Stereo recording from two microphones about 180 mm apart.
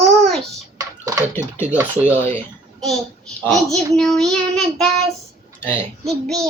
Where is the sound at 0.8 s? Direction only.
20° right (ahead or behind).